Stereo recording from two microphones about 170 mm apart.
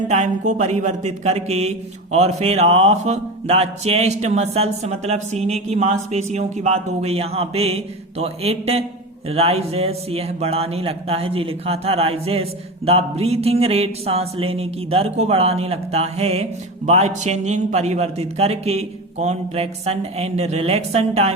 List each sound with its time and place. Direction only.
0.1 s a man's voice: 40° right (ahead or behind)